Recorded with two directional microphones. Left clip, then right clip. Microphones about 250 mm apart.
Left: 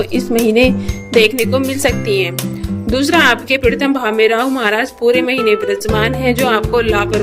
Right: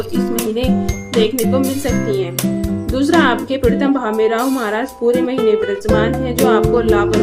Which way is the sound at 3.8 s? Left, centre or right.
Left.